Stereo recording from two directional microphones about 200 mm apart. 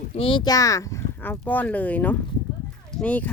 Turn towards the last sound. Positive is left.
turn(degrees=5)  # may be behind; listen again after turning